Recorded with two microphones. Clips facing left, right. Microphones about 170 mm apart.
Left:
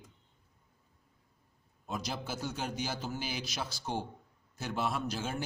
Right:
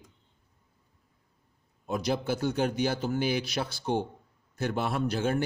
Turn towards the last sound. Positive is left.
turn(degrees=-60)  # may be behind; listen again after turning